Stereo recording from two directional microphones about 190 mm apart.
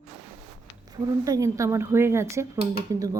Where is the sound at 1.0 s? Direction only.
15° right (ahead or behind).